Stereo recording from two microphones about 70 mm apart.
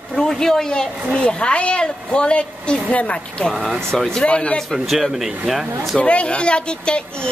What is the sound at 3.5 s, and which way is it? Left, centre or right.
Speech, centre.